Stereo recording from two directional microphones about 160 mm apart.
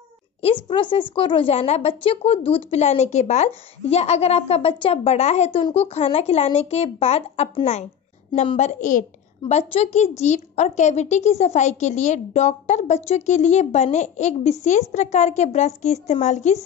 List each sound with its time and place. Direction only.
0.7 s a woman's voice: 30° left (ahead or behind); by 16.5 s 50° left (ahead or behind)